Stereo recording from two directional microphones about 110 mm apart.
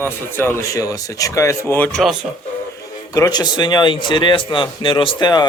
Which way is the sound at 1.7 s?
15° left (ahead or behind).